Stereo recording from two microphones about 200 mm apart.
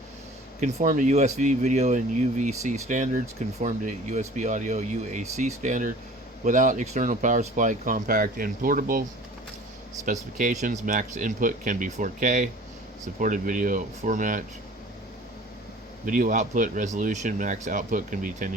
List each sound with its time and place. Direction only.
0.6 s speech: 40° right (ahead or behind)
10.1 s speech: 40° right (ahead or behind)
16.0 s speech: 40° right (ahead or behind)